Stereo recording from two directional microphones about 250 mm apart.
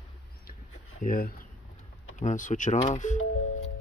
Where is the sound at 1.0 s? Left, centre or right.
Left.